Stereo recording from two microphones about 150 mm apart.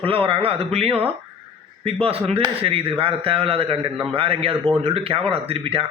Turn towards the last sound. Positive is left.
turn(degrees=-40)  # may be behind; listen again after turning